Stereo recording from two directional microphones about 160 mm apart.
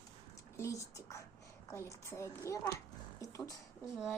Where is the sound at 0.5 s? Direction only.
20° left (ahead or behind).